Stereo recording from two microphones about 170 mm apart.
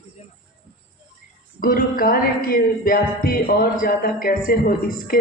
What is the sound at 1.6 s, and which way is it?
Speech, 55° left (ahead or behind).